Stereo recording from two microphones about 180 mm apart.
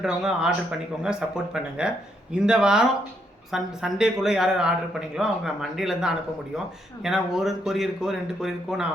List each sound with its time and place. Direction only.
0.0 s speech: 5° right (ahead or behind)
1.5 s speech: 5° right (ahead or behind)